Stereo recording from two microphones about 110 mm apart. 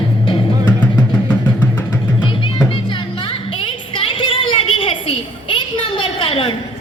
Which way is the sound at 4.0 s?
55° left (ahead or behind).